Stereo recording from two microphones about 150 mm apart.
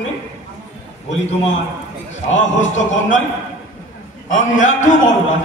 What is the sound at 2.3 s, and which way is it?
Speech, 55° left (ahead or behind).